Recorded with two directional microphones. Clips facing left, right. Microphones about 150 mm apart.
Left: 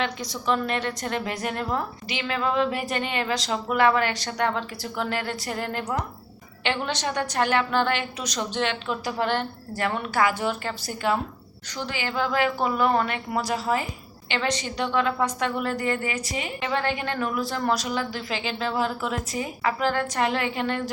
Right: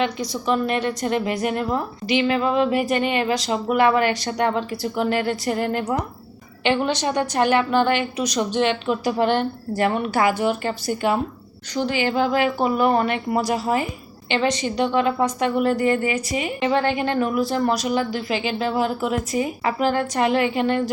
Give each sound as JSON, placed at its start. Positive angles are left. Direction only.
{"t": 0.0, "sound": "a woman's voice", "side_deg": -10}